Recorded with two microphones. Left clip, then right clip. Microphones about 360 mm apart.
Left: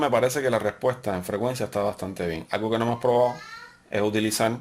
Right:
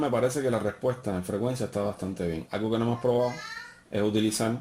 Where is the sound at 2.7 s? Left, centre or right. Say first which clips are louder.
Left 5 dB; left.